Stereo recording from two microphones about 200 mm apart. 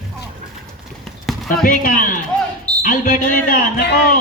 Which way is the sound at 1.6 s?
45° left (ahead or behind).